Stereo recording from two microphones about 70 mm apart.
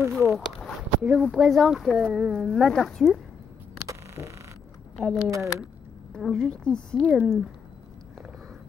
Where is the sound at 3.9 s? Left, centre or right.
Right.